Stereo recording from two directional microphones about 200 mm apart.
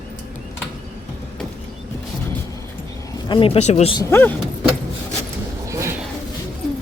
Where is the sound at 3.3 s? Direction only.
25° left (ahead or behind).